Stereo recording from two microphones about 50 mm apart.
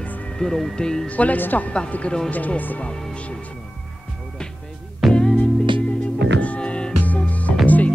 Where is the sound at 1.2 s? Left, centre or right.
Left.